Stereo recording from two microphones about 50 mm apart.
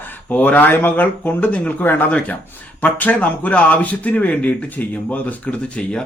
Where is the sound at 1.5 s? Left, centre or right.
Left.